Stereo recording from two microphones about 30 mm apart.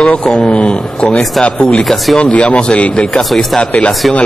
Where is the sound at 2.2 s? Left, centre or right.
Left.